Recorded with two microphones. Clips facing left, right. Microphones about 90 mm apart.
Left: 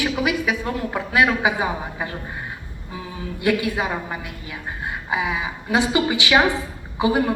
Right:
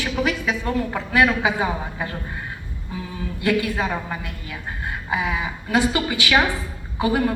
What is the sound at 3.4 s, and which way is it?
A woman's voice, 15° left (ahead or behind).